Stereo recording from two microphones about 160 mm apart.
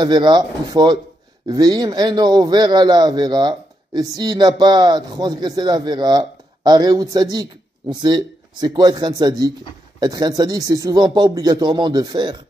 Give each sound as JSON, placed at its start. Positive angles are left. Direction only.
{"t": 0.0, "sound": "a man's voice", "side_deg": -25}